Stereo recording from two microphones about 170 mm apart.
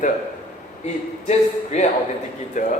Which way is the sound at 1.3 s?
40° left (ahead or behind).